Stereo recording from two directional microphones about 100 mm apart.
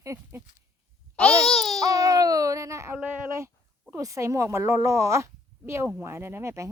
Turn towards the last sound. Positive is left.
turn(degrees=-25)  # may be behind; listen again after turning